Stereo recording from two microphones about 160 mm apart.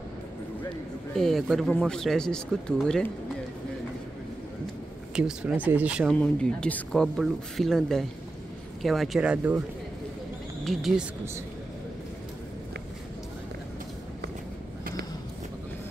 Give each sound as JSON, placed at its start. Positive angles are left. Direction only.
{"t": 1.1, "sound": "speech", "side_deg": 0}
{"t": 5.1, "sound": "speech", "side_deg": -5}
{"t": 6.1, "sound": "speech", "side_deg": 5}
{"t": 10.6, "sound": "speech", "side_deg": 0}